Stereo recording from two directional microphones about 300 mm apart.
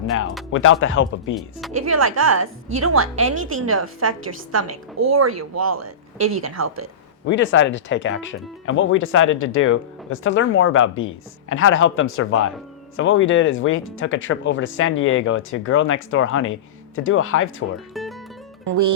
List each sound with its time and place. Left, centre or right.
0.5 s speech: left
1.7 s a woman's voice: right
2.6 s a woman's voice: right
3.0 s a woman's voice: right
3.3 s a woman's voice: right
4.5 s a woman's voice: right
7.3 s speech: left